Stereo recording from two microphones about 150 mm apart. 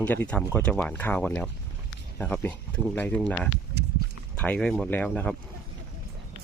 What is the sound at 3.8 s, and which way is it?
Livestock, 90° right.